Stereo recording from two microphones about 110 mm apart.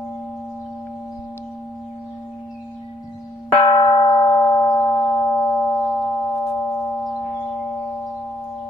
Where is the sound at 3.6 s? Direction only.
45° left (ahead or behind).